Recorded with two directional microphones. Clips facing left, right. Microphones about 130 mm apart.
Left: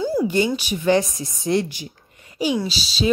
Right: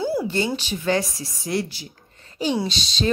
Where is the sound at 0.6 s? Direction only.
15° left (ahead or behind).